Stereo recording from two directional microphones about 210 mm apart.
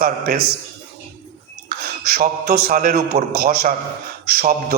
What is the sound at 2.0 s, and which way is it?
A man's voice, 45° right (ahead or behind).